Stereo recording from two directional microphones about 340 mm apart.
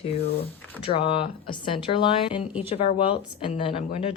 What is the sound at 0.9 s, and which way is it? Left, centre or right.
Speech, centre.